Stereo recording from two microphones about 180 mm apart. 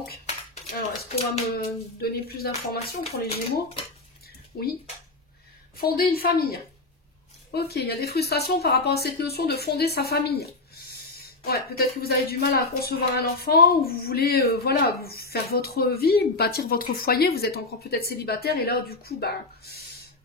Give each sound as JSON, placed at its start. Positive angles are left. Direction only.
{"t": 1.1, "sound": "speech", "side_deg": 35}
{"t": 2.0, "sound": "a woman's voice", "side_deg": 60}
{"t": 3.0, "sound": "speech", "side_deg": 35}
{"t": 5.8, "sound": "a woman's voice", "side_deg": 55}